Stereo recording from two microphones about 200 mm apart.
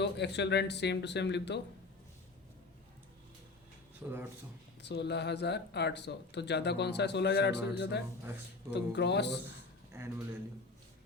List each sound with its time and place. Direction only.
0.0 s speech: 60° left (ahead or behind)
4.0 s speech: 10° right (ahead or behind)
4.8 s speech: 60° left (ahead or behind)
9.9 s speech: 15° right (ahead or behind)